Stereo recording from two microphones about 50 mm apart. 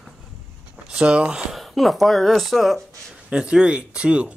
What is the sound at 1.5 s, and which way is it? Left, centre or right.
Speech, centre.